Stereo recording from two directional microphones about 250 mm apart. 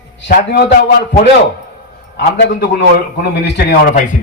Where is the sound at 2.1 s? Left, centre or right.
Left.